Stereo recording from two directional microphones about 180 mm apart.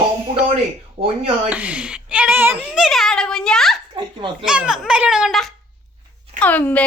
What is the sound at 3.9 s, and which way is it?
Speech, 25° right (ahead or behind).